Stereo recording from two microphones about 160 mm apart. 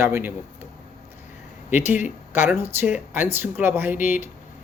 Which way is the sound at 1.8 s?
15° right (ahead or behind).